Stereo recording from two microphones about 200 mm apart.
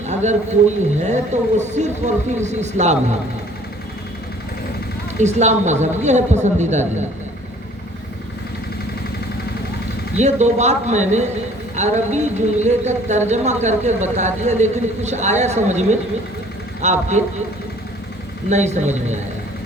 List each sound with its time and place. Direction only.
0.1 s speech: 35° right (ahead or behind)
5.2 s speech: 35° right (ahead or behind)
10.2 s speech: 35° right (ahead or behind)
18.4 s speech: 35° right (ahead or behind)